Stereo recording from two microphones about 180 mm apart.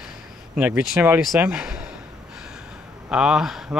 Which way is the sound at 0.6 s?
10° right (ahead or behind).